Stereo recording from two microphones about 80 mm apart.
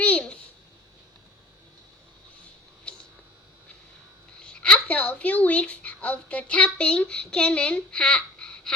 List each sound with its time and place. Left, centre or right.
0.0 s babbling: centre
2.9 s a sound: centre
4.4 s a woman's voice: centre